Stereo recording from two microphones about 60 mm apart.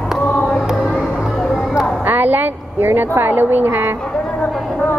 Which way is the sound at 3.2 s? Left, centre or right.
Right.